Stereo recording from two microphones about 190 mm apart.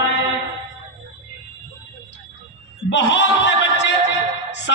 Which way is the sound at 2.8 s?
70° left (ahead or behind).